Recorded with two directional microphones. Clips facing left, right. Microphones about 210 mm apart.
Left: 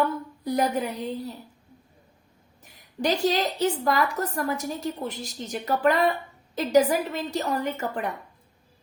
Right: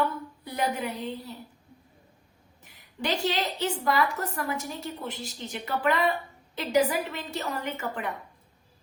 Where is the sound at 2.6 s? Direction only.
40° left (ahead or behind).